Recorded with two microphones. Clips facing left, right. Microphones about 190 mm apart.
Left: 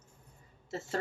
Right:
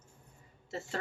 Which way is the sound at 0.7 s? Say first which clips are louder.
Left 3 dB; 40° left (ahead or behind).